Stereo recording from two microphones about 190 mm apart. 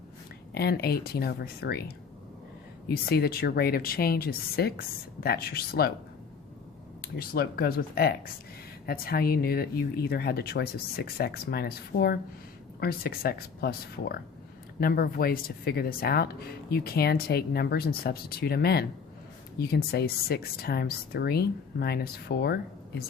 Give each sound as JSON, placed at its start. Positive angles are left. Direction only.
{"t": 0.5, "sound": "speech", "side_deg": 55}
{"t": 2.9, "sound": "speech", "side_deg": 55}
{"t": 7.0, "sound": "speech", "side_deg": 55}